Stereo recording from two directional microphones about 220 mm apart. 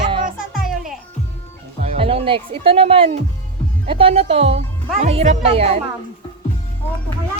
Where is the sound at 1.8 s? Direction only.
25° right (ahead or behind).